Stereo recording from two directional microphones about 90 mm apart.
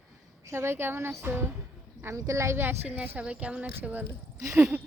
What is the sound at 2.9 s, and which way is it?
A woman's voice, 15° right (ahead or behind).